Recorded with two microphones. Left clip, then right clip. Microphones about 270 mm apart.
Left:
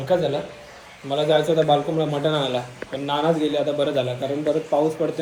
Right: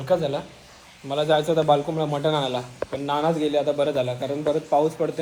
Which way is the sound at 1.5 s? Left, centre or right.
Right.